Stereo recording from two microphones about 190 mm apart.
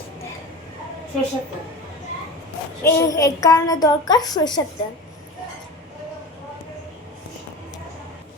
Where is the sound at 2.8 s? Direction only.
15° left (ahead or behind).